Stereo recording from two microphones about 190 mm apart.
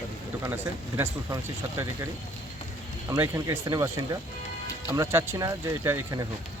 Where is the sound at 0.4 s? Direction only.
10° right (ahead or behind).